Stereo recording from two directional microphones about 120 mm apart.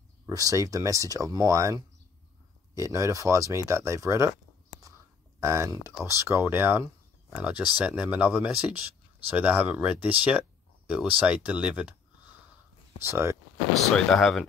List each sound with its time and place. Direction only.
0.3 s speech: 30° right (ahead or behind)
5.4 s speech: 25° right (ahead or behind)
13.0 s speech: 20° right (ahead or behind)
13.8 s speech: 5° left (ahead or behind)